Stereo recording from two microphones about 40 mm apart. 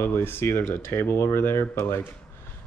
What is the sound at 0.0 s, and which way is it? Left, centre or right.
Speech, left.